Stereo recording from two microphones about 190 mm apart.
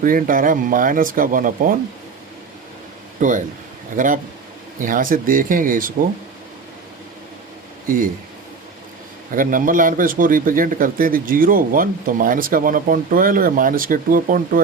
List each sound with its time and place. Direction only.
0.0 s a man's voice: 45° right (ahead or behind)
3.2 s a man's voice: 45° right (ahead or behind)
7.9 s a man's voice: 45° right (ahead or behind)
9.3 s a man's voice: 45° right (ahead or behind)